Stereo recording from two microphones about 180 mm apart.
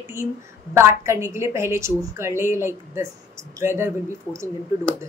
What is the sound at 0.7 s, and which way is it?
A woman's voice, 15° right (ahead or behind).